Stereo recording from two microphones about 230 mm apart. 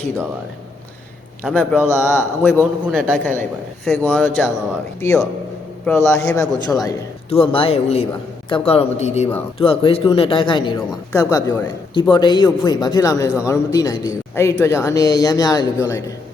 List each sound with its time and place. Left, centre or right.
1.5 s a man's voice: centre
1.9 s a man's voice: centre
2.5 s a man's voice: centre